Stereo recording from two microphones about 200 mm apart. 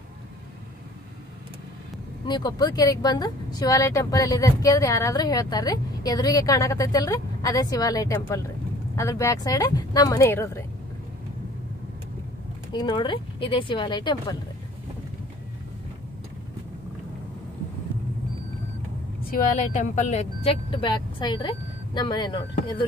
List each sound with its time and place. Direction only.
2.2 s speech: 20° left (ahead or behind)
12.7 s speech: 25° left (ahead or behind)
19.3 s speech: 40° left (ahead or behind); by 22.5 s 25° left (ahead or behind)